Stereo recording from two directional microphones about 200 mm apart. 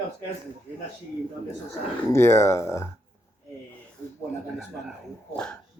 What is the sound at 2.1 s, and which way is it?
Speech, 15° left (ahead or behind).